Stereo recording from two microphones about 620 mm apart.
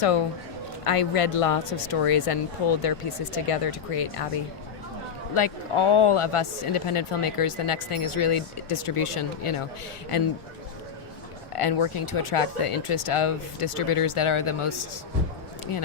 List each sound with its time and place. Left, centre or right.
0.0 s speech: left
5.3 s speech: left
11.5 s speech: left